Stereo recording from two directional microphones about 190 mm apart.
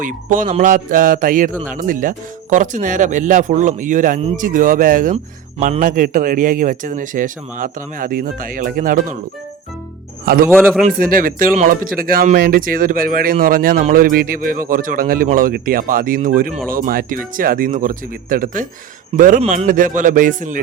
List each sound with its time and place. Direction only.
0.0 s a man's voice: 45° right (ahead or behind)
5.1 s a man's voice: 35° right (ahead or behind)
10.2 s a man's voice: 50° right (ahead or behind)
10.5 s a man's voice: centre (ahead or behind)
10.8 s a man's voice: 50° right (ahead or behind)